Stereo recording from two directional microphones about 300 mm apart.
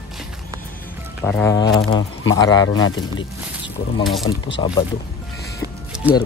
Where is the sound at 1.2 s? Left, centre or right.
Centre.